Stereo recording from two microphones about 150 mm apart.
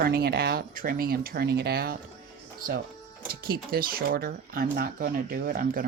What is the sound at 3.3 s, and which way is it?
Speech, 80° right.